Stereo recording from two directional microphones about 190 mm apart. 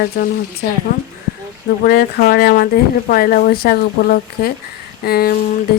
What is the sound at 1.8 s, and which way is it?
Speech, 50° left (ahead or behind).